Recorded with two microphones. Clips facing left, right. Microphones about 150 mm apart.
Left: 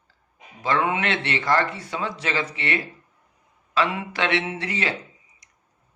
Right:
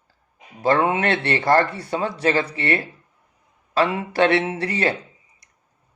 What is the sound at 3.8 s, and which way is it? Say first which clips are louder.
Speech: right 6 dB; 30° right (ahead or behind).